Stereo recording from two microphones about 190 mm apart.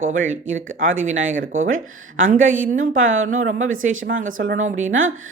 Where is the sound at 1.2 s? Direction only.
90° right.